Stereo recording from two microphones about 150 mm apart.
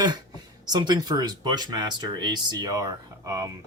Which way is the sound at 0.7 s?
25° right (ahead or behind).